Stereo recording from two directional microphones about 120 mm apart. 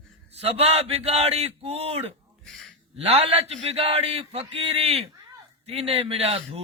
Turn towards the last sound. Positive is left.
turn(degrees=-60)  # may be behind; listen again after turning